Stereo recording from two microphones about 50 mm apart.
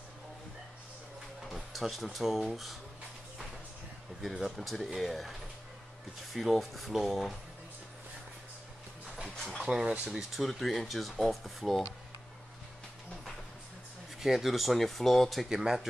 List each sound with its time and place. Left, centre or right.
1.5 s a sound: centre
2.0 s speech: centre
4.2 s speech: centre
6.3 s speech: centre
9.6 s speech: centre
10.3 s speech: centre
14.2 s speech: centre